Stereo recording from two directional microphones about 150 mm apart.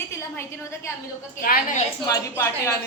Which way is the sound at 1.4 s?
75° left (ahead or behind).